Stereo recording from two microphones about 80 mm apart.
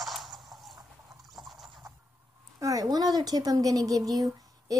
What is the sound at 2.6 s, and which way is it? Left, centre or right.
Speech, right.